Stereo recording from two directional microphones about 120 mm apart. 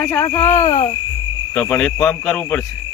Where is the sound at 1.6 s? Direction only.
10° left (ahead or behind).